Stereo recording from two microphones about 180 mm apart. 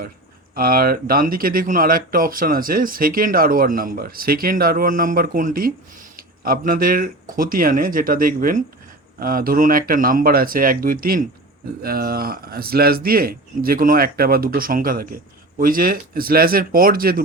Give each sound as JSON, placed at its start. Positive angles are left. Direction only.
{"t": 0.5, "sound": "speech", "side_deg": -55}